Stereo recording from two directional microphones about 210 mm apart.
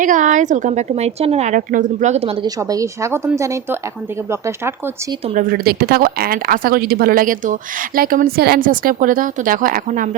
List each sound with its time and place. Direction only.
0.0 s speech: 35° right (ahead or behind)
2.6 s speech: 15° right (ahead or behind)
5.2 s speech: 35° right (ahead or behind)